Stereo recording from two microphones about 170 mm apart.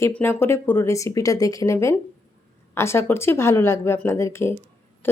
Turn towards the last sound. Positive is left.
turn(degrees=15)  # may be behind; listen again after turning